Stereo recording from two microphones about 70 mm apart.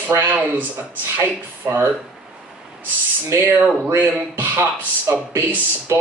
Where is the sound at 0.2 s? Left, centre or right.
Right.